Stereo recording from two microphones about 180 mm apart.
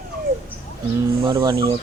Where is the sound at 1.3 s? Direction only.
20° right (ahead or behind).